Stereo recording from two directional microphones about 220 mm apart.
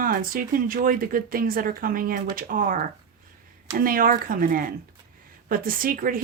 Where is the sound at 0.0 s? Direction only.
40° right (ahead or behind).